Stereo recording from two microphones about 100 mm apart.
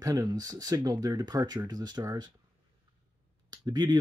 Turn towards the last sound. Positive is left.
turn(degrees=-40)  # may be behind; listen again after turning